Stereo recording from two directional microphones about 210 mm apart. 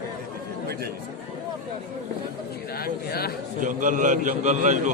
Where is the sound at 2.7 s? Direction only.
45° left (ahead or behind).